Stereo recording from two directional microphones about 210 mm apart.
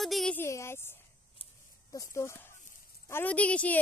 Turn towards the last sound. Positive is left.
turn(degrees=5)  # may be behind; listen again after turning